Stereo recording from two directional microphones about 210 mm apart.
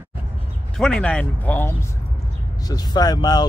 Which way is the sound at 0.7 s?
5° left (ahead or behind).